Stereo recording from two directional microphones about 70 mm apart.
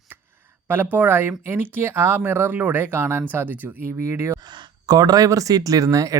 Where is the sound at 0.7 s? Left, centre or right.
Right.